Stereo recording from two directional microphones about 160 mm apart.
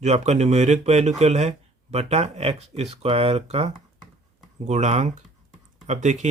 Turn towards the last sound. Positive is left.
turn(degrees=-45)  # may be behind; listen again after turning